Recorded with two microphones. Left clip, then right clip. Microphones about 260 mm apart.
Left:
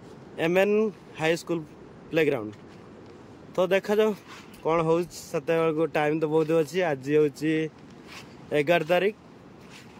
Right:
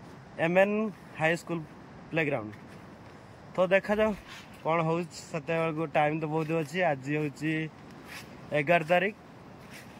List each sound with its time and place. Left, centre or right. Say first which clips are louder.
0.4 s a man's voice: left 3 dB; centre
3.5 s speech: left 2 dB; centre